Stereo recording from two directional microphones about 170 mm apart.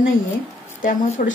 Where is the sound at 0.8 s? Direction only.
50° left (ahead or behind).